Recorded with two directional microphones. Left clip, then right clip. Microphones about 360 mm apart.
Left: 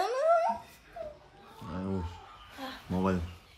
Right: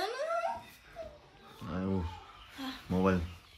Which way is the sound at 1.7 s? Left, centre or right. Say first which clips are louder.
Right 1 dB; centre.